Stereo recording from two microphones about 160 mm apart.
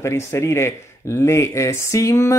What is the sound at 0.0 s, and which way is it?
Speech, 15° left (ahead or behind).